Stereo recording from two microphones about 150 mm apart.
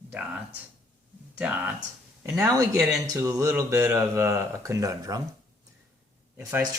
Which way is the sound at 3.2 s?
20° right (ahead or behind).